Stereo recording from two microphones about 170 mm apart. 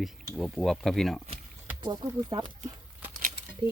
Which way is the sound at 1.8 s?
25° right (ahead or behind).